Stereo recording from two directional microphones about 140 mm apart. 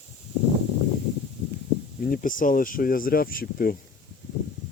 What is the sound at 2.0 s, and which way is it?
Speech, 80° left.